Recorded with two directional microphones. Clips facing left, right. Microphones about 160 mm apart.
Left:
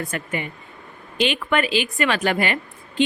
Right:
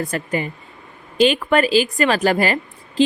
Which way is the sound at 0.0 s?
35° right (ahead or behind).